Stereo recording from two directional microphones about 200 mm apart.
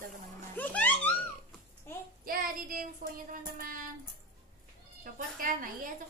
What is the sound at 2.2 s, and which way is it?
A woman's voice, 45° right (ahead or behind).